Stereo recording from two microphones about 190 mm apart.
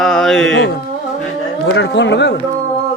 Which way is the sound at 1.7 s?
70° left (ahead or behind).